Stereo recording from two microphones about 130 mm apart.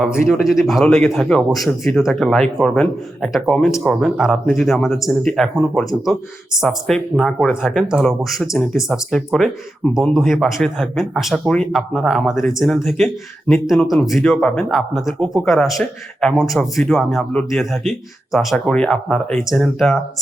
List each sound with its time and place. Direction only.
0.3 s speech: 5° right (ahead or behind)